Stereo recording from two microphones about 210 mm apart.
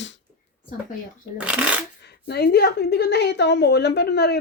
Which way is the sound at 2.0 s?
50° left (ahead or behind).